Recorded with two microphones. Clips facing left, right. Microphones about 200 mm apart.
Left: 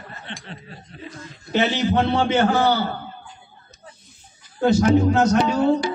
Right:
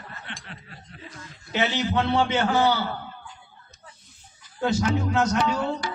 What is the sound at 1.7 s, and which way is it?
Speech, 20° left (ahead or behind).